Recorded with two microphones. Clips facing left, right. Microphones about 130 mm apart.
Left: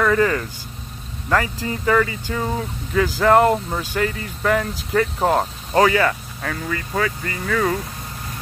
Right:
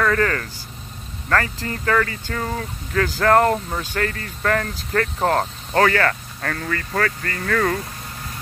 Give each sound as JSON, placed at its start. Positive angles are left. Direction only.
{"t": 0.0, "sound": "speech", "side_deg": 10}